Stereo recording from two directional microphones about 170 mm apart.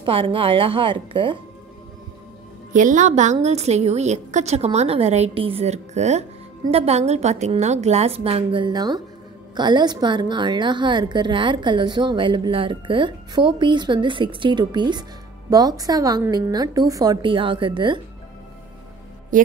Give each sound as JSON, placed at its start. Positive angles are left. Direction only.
{"t": 0.0, "sound": "a woman's voice", "side_deg": -30}
{"t": 2.7, "sound": "a woman's voice", "side_deg": -50}